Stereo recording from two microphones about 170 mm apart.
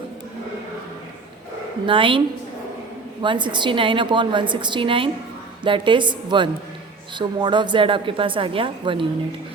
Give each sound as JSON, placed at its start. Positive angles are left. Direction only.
{"t": 1.9, "sound": "a woman's voice", "side_deg": -30}